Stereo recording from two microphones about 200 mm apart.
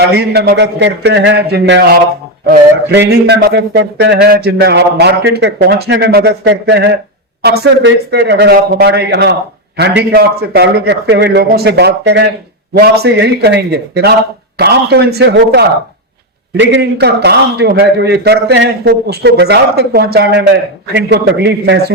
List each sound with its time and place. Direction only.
0.0 s speech: 55° right (ahead or behind)